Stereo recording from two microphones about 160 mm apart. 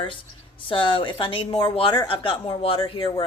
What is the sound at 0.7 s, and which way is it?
Speech, 30° left (ahead or behind).